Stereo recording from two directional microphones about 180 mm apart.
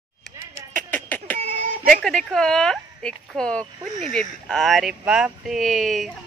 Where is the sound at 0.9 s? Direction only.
10° left (ahead or behind).